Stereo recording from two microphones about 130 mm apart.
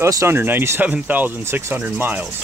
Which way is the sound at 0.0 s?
20° right (ahead or behind).